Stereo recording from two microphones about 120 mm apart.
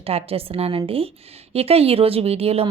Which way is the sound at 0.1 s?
55° right (ahead or behind).